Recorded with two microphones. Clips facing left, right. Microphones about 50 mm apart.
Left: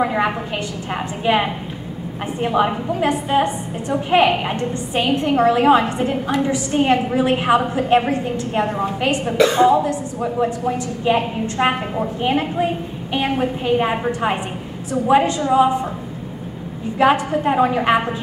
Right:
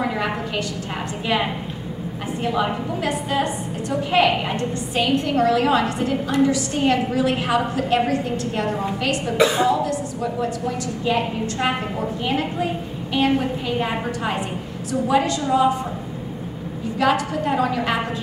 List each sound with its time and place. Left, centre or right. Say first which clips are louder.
0.0 s a woman's voice: left 5 dB; left
2.4 s a woman's voice: left 4 dB; left
17.0 s a woman's voice: left 4 dB; left